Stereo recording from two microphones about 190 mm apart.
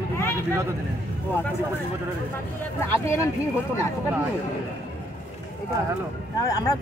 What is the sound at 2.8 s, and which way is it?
Speech, 15° left (ahead or behind).